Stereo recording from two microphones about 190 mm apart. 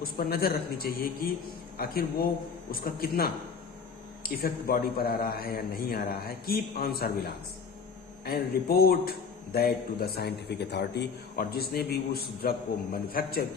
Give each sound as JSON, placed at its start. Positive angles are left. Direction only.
{"t": 0.0, "sound": "a man's voice", "side_deg": 55}
{"t": 8.2, "sound": "a man's voice", "side_deg": 50}